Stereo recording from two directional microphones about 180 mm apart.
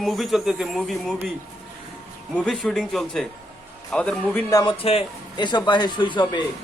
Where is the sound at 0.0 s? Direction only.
Centre (ahead or behind).